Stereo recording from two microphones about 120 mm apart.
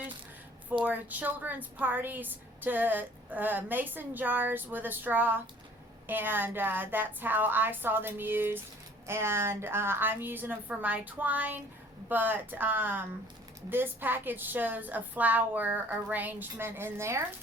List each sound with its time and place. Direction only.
0.9 s a woman's voice: 15° right (ahead or behind)